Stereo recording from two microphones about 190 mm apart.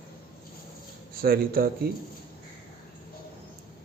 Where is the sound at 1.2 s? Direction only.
50° right (ahead or behind).